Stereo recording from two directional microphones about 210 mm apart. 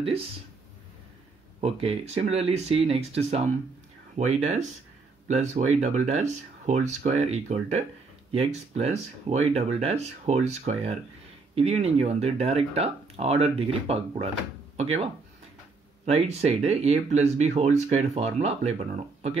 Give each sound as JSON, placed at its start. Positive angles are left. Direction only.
{"t": 1.6, "sound": "speech", "side_deg": -30}
{"t": 16.1, "sound": "speech", "side_deg": -30}